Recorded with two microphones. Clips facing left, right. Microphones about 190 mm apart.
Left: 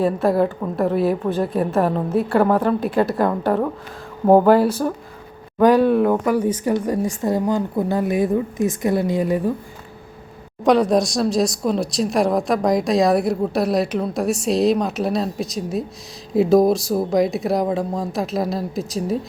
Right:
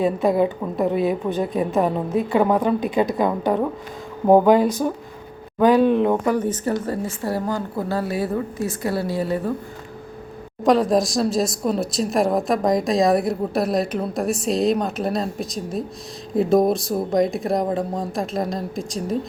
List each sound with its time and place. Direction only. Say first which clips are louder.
0.0 s a woman's voice: left 1 dB; centre (ahead or behind)
10.7 s speech: left 1 dB; centre (ahead or behind)